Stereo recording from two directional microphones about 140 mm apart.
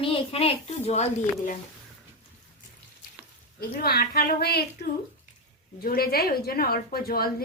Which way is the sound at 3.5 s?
90° left.